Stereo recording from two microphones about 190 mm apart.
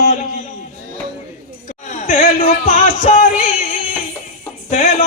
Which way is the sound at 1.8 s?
40° left (ahead or behind).